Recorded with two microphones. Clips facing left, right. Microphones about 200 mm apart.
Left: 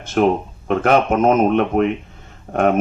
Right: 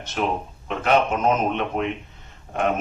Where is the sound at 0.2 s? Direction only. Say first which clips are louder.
Left 9 dB; 50° left (ahead or behind).